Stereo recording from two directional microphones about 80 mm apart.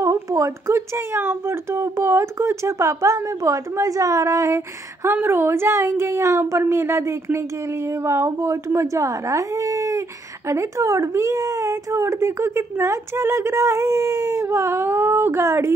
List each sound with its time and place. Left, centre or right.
0.0 s speech: right